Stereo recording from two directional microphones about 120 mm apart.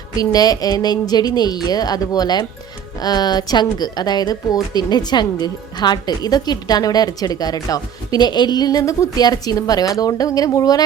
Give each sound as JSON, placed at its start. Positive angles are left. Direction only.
{"t": 0.2, "sound": "a woman's voice", "side_deg": 30}